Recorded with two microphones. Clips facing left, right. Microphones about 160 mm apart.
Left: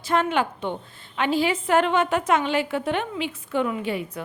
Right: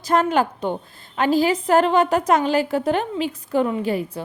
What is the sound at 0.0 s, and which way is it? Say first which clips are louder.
A woman's voice: right 4 dB; 40° right (ahead or behind).